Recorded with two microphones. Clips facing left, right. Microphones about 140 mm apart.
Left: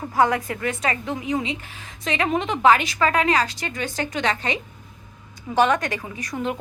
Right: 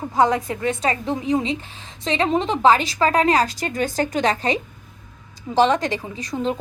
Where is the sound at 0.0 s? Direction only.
20° right (ahead or behind); by 4.6 s 40° right (ahead or behind).